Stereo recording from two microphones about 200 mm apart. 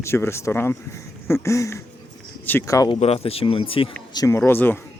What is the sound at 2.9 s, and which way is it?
Speech, 30° left (ahead or behind).